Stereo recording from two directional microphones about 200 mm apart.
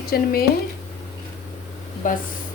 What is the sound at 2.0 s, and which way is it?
Speech, 40° left (ahead or behind).